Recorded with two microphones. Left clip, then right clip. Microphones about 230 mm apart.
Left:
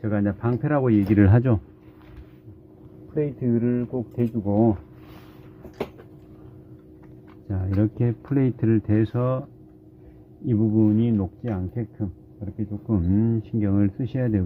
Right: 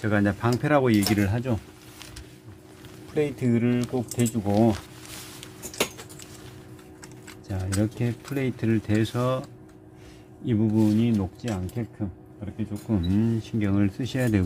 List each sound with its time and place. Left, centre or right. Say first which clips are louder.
0.0 s speech: right 2 dB; centre
1.2 s speech: left 7 dB; left
3.2 s speech: even; centre
7.5 s speech: left 2 dB; centre
8.3 s speech: left 5 dB; centre
10.4 s speech: left 2 dB; centre